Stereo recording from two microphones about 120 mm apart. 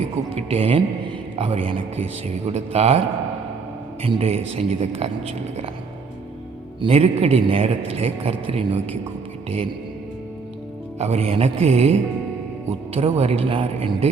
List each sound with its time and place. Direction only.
0.3 s speech: 55° right (ahead or behind)
4.0 s speech: 55° right (ahead or behind)
6.8 s a man's voice: 55° right (ahead or behind)
10.9 s speech: 60° right (ahead or behind)